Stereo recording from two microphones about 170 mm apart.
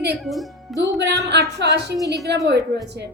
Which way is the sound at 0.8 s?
90° right.